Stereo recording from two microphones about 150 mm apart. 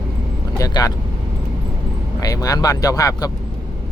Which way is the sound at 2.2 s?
25° left (ahead or behind).